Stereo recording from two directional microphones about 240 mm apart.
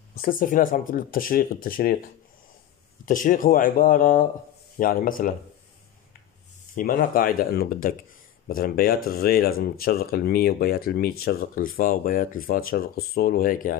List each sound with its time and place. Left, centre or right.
0.1 s speech: left
3.1 s speech: left
6.7 s speech: left